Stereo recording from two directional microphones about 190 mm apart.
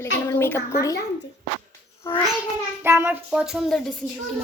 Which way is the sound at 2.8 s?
10° right (ahead or behind).